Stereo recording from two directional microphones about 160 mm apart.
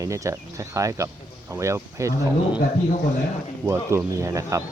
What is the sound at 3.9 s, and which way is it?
Speech, 20° right (ahead or behind).